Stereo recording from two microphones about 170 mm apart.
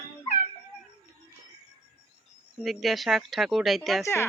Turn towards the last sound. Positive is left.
turn(degrees=15)  # may be behind; listen again after turning